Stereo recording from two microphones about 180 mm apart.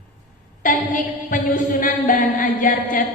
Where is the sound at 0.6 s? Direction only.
45° left (ahead or behind).